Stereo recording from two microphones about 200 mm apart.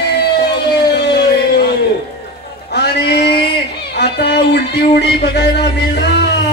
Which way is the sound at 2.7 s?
55° left (ahead or behind).